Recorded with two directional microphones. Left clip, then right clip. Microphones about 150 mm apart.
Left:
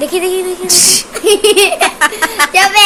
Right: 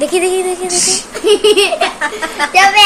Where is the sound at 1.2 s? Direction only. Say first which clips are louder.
Left 1 dB; 70° left (ahead or behind); by 2.8 s 90° left.